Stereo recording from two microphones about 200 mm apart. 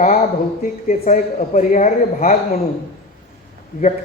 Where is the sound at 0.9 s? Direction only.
35° left (ahead or behind).